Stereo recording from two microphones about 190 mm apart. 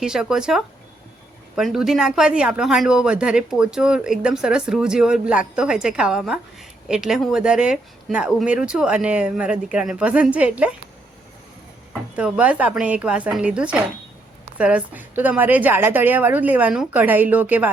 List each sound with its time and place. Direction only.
0.0 s speech: 5° right (ahead or behind)
12.1 s a woman's voice: 5° right (ahead or behind)